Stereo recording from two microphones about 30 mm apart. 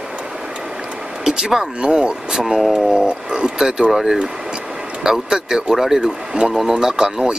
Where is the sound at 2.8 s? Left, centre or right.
Right.